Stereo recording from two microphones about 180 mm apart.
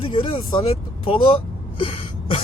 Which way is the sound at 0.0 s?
30° left (ahead or behind).